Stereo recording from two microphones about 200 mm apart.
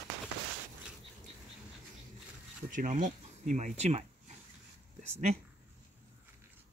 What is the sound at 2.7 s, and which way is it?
Speech, 40° right (ahead or behind).